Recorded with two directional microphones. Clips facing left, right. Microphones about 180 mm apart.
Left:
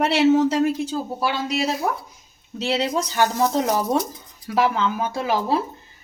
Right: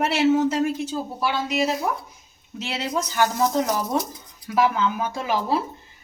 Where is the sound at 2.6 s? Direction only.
35° left (ahead or behind).